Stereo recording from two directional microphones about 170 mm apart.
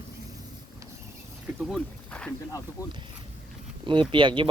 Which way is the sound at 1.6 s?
Centre (ahead or behind).